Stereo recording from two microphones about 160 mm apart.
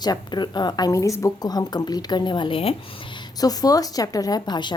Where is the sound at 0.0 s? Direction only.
25° left (ahead or behind).